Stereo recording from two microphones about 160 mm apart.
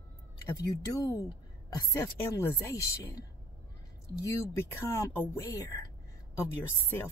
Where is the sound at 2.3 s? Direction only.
20° left (ahead or behind).